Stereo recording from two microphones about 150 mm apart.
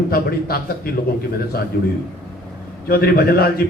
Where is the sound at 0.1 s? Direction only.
90° left.